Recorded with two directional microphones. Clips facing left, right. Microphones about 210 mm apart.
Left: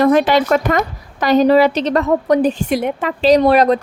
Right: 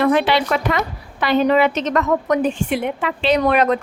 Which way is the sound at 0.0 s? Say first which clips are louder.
Left 4 dB; 40° left (ahead or behind).